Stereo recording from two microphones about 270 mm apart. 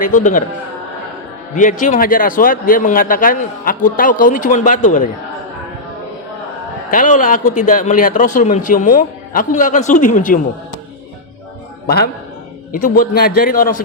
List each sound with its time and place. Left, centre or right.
0.0 s a man's voice: left
1.5 s a man's voice: left
6.9 s a man's voice: left
11.9 s a man's voice: left